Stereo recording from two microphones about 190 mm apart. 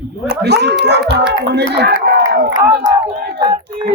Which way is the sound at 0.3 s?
60° right (ahead or behind).